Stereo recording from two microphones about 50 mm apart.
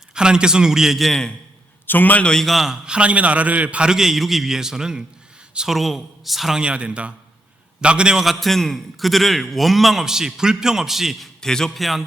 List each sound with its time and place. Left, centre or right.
0.1 s a man's voice: centre
1.9 s a man's voice: left
2.4 s a man's voice: centre
2.8 s a man's voice: right
3.8 s a man's voice: centre
6.6 s a man's voice: right
8.2 s a man's voice: centre
11.3 s a man's voice: centre
11.8 s a man's voice: centre